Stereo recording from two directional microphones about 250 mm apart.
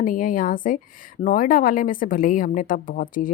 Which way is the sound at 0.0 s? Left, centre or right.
Left.